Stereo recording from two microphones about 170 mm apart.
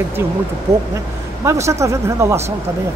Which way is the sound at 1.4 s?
15° right (ahead or behind).